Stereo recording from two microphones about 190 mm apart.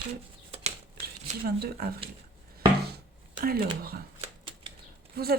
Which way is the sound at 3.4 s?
50° right (ahead or behind).